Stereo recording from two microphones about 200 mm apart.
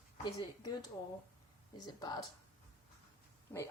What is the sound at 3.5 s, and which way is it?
Speech, 10° left (ahead or behind).